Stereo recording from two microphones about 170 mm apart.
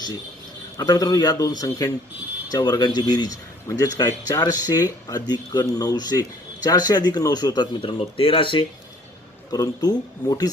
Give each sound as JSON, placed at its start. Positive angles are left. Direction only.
{"t": 0.8, "sound": "speech", "side_deg": 20}